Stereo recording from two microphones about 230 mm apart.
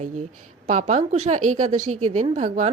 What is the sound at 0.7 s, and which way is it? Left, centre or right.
A woman's voice, right.